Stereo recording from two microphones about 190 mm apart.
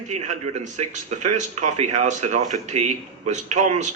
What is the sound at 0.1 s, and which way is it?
Speech, 35° right (ahead or behind).